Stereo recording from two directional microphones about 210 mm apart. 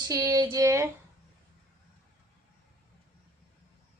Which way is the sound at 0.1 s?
15° right (ahead or behind).